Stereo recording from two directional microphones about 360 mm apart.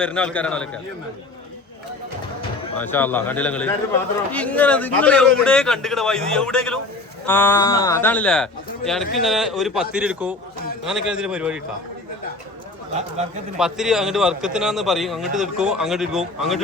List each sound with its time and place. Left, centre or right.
0.0 s speech: centre
2.7 s speech: centre
12.9 s speech: centre
13.6 s speech: centre